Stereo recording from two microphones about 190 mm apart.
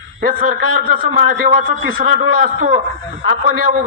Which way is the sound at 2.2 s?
40° right (ahead or behind).